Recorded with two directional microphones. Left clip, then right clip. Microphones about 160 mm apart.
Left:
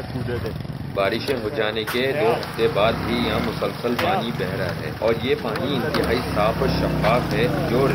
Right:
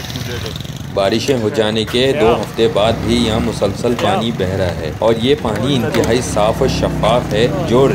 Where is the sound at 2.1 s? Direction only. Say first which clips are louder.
Right 7 dB; 60° right (ahead or behind).